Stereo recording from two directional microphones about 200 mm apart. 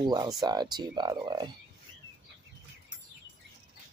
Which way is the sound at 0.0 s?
20° right (ahead or behind).